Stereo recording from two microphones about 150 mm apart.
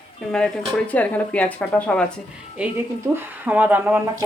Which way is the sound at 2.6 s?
10° right (ahead or behind).